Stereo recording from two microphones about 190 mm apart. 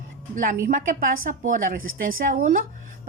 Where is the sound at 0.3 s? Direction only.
45° right (ahead or behind).